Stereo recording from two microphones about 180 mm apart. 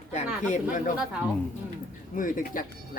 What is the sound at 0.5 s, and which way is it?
Speech, 45° left (ahead or behind).